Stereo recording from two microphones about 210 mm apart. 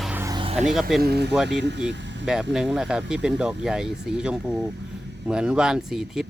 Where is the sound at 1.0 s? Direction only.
50° right (ahead or behind).